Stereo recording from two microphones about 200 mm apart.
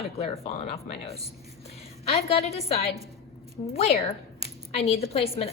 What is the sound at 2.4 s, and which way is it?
A woman's voice, 30° left (ahead or behind).